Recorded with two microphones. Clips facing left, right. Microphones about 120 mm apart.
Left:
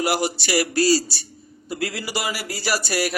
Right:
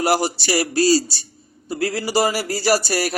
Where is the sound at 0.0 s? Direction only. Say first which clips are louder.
Right 3 dB; 35° right (ahead or behind).